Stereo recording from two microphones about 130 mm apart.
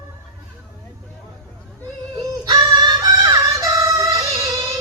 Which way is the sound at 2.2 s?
35° right (ahead or behind).